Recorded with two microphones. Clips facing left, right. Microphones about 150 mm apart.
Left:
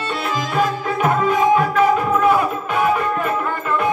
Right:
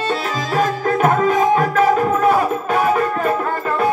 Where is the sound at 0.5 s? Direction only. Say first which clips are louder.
Right 3 dB; 45° right (ahead or behind).